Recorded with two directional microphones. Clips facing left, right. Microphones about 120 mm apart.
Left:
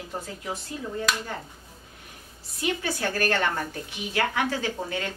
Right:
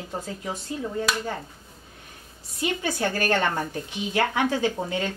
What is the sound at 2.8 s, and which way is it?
Speech, 15° right (ahead or behind).